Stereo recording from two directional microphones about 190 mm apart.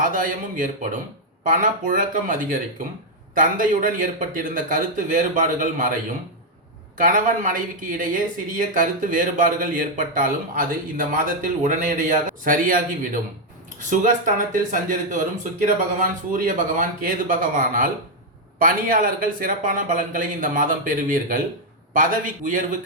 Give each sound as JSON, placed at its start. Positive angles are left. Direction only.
{"t": 0.0, "sound": "speech", "side_deg": -45}
{"t": 6.9, "sound": "speech", "side_deg": -45}